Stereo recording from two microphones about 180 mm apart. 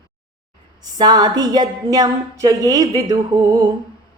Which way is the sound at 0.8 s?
20° right (ahead or behind).